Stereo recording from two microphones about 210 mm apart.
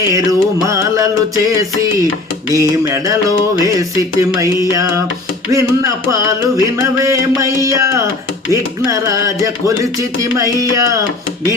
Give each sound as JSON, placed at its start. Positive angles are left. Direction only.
{"t": 0.1, "sound": "music", "side_deg": -15}